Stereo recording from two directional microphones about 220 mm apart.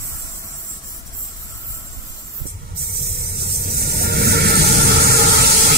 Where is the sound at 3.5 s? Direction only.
45° right (ahead or behind).